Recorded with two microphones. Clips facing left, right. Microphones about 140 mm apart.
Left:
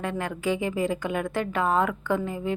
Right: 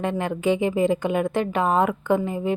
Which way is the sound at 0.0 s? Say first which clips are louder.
Right 5 dB; 20° right (ahead or behind).